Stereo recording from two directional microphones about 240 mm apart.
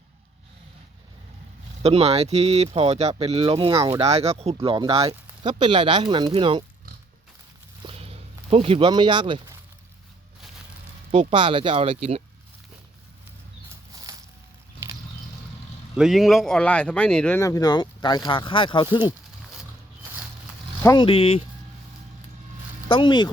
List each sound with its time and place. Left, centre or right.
1.8 s speech: right
7.9 s a sound: right
11.1 s speech: right
14.1 s a sound: centre
16.0 s speech: centre
20.8 s speech: centre
22.9 s speech: centre